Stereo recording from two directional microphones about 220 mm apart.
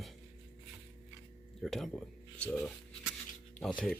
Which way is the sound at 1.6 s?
Centre (ahead or behind).